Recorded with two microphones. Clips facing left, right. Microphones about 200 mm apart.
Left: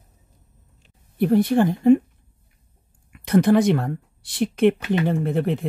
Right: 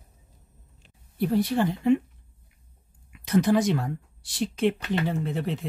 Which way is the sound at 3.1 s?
55° left (ahead or behind).